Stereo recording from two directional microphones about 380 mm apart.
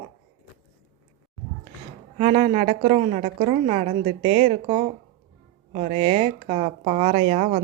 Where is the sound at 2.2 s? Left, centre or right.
Centre.